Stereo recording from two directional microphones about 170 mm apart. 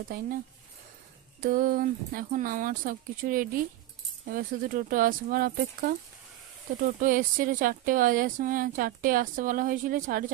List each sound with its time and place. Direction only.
0.1 s speech: 60° right (ahead or behind)
1.4 s speech: 55° right (ahead or behind)
7.0 s speech: 55° right (ahead or behind)